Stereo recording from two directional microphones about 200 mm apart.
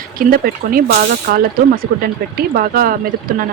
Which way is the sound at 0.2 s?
45° right (ahead or behind).